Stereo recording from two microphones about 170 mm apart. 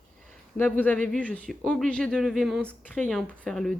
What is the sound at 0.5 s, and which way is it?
Speech, 10° left (ahead or behind).